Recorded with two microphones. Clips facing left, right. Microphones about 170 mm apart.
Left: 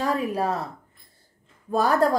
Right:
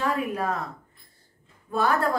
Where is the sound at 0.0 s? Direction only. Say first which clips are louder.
Left 2 dB; 35° left (ahead or behind).